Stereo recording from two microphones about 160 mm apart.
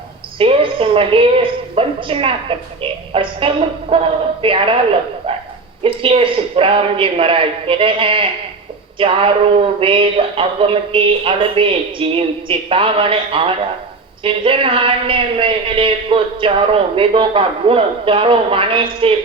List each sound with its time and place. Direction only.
0.3 s a man's voice: 35° right (ahead or behind)
5.8 s a man's voice: 35° right (ahead or behind)